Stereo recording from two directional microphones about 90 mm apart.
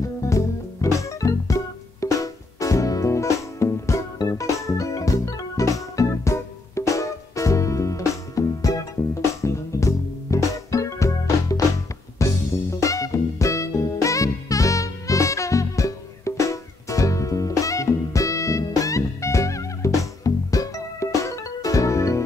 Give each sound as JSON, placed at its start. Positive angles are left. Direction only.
{"t": 0.2, "sound": "music", "side_deg": 35}
{"t": 9.4, "sound": "organ", "side_deg": 35}
{"t": 12.2, "sound": "music", "side_deg": 35}